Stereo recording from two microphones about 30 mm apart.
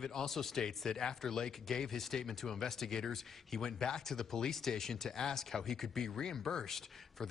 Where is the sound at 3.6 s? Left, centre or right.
Left.